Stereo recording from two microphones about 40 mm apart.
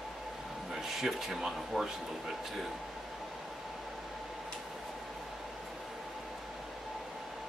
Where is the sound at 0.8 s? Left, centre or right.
Centre.